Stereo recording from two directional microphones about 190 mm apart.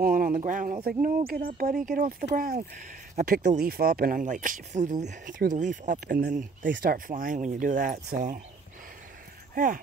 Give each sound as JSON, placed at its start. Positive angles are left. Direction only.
{"t": 0.0, "sound": "speech", "side_deg": -45}
{"t": 3.4, "sound": "speech", "side_deg": -55}